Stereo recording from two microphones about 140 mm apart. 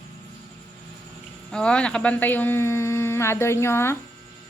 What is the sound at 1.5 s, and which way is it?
Speech, 5° left (ahead or behind).